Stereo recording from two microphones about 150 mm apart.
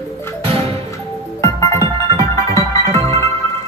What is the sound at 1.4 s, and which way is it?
Music, 20° left (ahead or behind).